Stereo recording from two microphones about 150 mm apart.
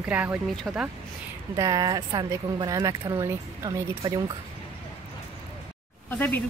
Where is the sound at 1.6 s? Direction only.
25° right (ahead or behind).